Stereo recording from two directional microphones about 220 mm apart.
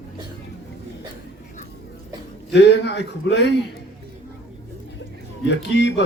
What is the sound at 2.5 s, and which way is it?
Speech, 50° left (ahead or behind).